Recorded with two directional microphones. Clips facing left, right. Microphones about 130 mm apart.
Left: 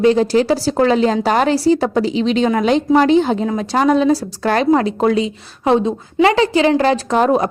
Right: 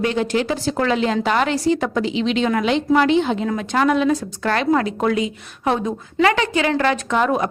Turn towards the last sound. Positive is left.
turn(degrees=35)  # may be behind; listen again after turning